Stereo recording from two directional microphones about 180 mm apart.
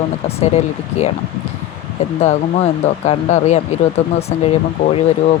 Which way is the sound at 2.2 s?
40° left (ahead or behind).